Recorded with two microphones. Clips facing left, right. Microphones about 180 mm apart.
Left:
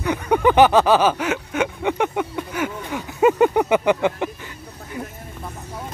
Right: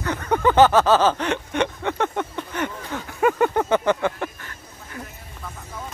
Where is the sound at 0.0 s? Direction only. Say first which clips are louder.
Left 3 dB; 10° left (ahead or behind).